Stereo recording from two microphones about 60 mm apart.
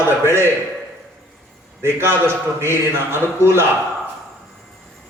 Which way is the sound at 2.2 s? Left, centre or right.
Right.